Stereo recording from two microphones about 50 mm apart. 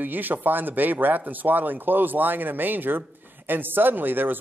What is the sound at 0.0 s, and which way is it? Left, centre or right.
A man's voice, right.